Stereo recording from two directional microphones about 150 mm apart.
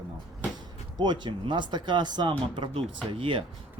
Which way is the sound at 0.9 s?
30° right (ahead or behind).